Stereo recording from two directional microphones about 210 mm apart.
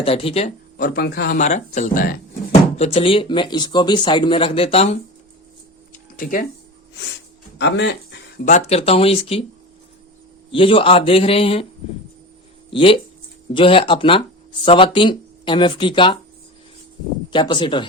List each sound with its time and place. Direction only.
0.0 s speech: 25° left (ahead or behind)
0.8 s speech: 45° left (ahead or behind)
1.4 s speech: 35° left (ahead or behind)
2.5 s speech: 30° left (ahead or behind)
7.6 s speech: 55° left (ahead or behind)
8.4 s speech: 35° left (ahead or behind)
10.5 s speech: 25° left (ahead or behind)
12.7 s speech: 25° left (ahead or behind)
17.3 s speech: 25° left (ahead or behind)